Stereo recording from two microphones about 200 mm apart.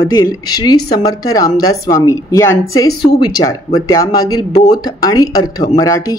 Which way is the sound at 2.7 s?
90° left.